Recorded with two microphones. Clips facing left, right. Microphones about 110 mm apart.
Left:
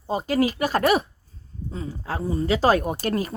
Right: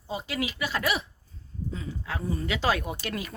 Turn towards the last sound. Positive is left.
turn(degrees=40)  # may be behind; listen again after turning